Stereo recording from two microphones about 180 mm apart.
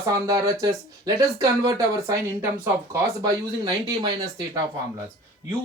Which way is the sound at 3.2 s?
25° right (ahead or behind).